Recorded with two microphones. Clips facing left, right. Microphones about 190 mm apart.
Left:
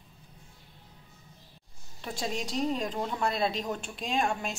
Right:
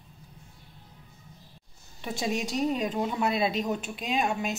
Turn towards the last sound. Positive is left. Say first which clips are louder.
# right 2 dB
turn(degrees=-5)  # may be behind; listen again after turning